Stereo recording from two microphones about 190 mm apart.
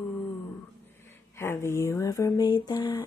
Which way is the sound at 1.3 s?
15° left (ahead or behind).